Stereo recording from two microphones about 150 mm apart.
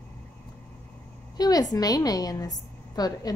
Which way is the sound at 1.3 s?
25° left (ahead or behind).